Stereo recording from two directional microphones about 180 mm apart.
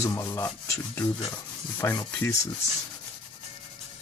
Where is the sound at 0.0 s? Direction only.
15° left (ahead or behind).